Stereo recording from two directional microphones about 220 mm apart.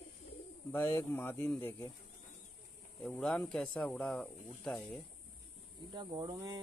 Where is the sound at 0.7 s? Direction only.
10° left (ahead or behind).